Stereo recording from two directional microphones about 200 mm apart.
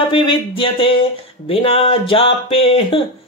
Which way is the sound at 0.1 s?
25° left (ahead or behind).